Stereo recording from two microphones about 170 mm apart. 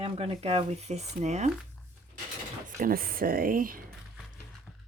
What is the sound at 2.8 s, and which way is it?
Speech, 60° right (ahead or behind).